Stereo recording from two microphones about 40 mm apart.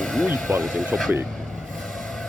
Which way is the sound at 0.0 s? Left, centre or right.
Centre.